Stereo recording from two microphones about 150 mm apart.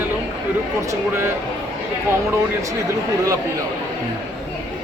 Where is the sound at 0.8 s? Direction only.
15° right (ahead or behind).